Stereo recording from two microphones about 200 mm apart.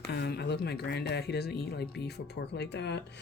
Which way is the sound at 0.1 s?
55° left (ahead or behind).